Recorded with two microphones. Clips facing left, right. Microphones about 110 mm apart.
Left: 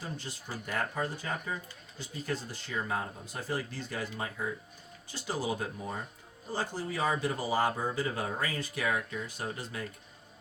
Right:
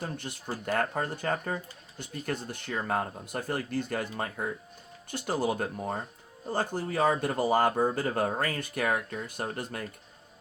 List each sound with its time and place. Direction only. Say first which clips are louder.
0.0 s speech: right 4 dB; 55° right (ahead or behind)